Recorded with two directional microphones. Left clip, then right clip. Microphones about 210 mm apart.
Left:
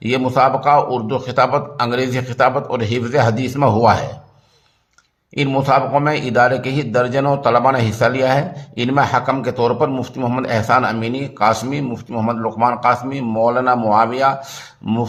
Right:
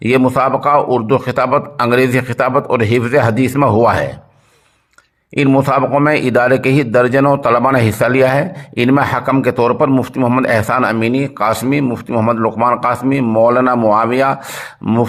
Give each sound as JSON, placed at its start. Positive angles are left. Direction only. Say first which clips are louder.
{"t": 0.0, "sound": "a man's voice", "louder": "right 2 dB", "side_deg": -35}
{"t": 5.3, "sound": "a man's voice", "louder": "right 3 dB", "side_deg": -35}